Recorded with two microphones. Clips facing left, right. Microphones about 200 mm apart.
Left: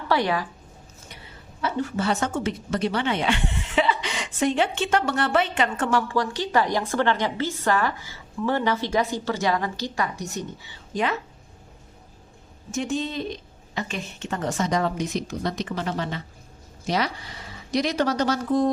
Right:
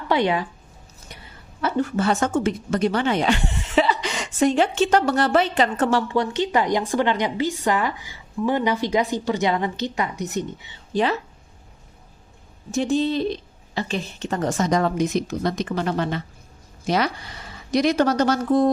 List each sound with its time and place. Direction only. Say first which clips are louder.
0.1 s a woman's voice: right 3 dB; 20° right (ahead or behind)
1.6 s a woman's voice: right 4 dB; 50° right (ahead or behind); by 10.8 s 20° right (ahead or behind)
10.9 s a woman's voice: right 4 dB; 30° right (ahead or behind)
12.7 s a woman's voice: right 6 dB; 35° right (ahead or behind); by 18.7 s 50° right (ahead or behind)